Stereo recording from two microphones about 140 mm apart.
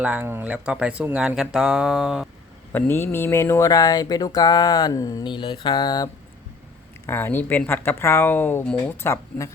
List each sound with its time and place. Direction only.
0.0 s speech: 10° right (ahead or behind)
2.7 s a sound: 15° left (ahead or behind)
7.1 s speech: 15° left (ahead or behind)